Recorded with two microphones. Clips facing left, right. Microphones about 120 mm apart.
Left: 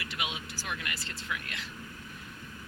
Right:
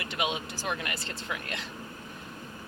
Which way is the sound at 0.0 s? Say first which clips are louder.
Right 6 dB; 35° right (ahead or behind).